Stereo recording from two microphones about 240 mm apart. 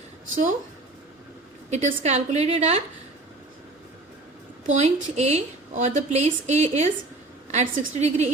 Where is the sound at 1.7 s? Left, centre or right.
Right.